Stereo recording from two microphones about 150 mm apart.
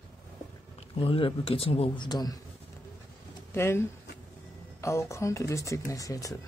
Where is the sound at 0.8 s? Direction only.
40° left (ahead or behind).